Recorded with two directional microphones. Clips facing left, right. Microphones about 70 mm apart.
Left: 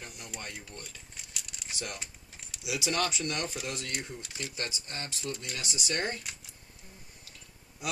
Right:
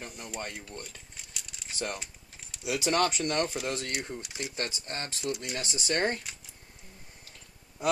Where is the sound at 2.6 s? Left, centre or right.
Right.